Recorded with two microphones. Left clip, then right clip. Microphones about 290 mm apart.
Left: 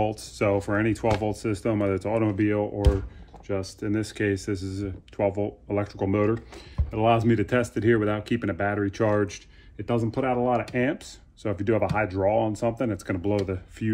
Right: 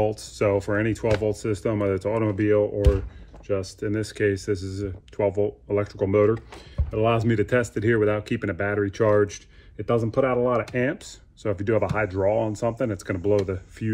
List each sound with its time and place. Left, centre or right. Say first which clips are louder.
0.1 s speech: right 2 dB; centre